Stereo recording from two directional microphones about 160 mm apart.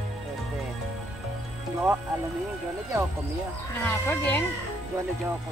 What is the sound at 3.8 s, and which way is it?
Speech, 10° left (ahead or behind).